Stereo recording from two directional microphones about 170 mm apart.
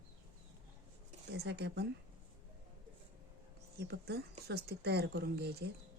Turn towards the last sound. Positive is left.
turn(degrees=-70)  # may be behind; listen again after turning